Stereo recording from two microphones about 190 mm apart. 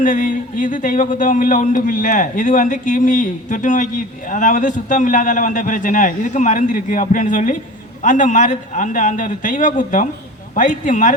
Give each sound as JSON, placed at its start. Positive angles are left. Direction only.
{"t": 0.0, "sound": "a man's voice", "side_deg": 45}